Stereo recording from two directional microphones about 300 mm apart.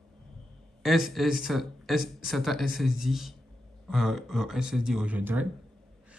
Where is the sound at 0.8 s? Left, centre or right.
Centre.